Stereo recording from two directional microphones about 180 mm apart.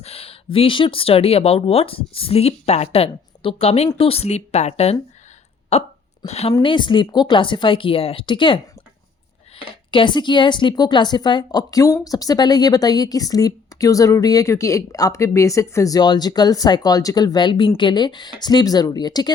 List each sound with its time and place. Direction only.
0.0 s a sound: 35° left (ahead or behind)
0.5 s a woman's voice: 30° left (ahead or behind)
9.9 s a woman's voice: 25° left (ahead or behind)